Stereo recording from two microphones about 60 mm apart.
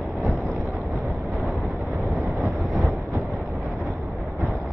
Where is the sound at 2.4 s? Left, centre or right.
Centre.